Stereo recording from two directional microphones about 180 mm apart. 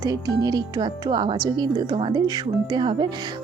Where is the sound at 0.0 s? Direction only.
20° right (ahead or behind).